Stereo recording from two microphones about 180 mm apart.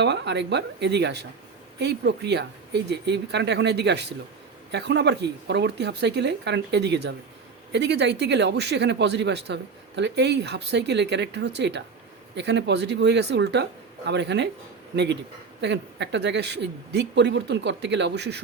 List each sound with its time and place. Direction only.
0.0 s speech: 75° right (ahead or behind)